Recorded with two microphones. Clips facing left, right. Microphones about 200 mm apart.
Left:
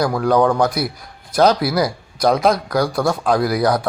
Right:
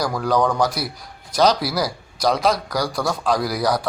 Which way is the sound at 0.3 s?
10° left (ahead or behind).